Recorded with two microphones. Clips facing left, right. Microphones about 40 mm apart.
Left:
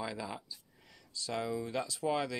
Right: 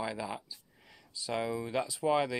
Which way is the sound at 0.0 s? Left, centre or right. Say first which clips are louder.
Right 3 dB; centre.